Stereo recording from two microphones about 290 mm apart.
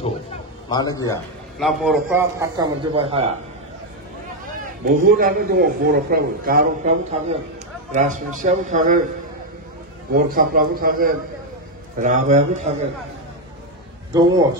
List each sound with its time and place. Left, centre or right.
0.7 s a man's voice: centre
1.6 s a man's voice: centre; by 3.3 s right
4.8 s a man's voice: right
10.1 s a man's voice: right
14.1 s a man's voice: centre